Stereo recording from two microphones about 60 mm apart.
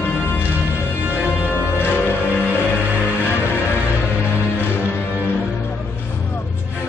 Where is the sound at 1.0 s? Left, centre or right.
Right.